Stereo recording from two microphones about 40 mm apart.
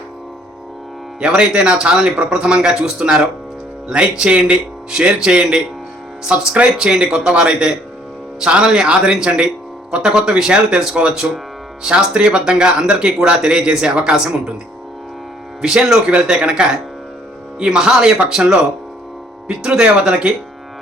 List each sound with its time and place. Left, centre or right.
1.2 s speech: right
3.9 s speech: right
4.9 s speech: centre
10.2 s speech: centre
15.7 s speech: centre